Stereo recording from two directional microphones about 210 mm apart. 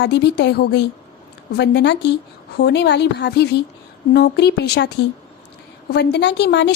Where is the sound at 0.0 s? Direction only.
55° left (ahead or behind).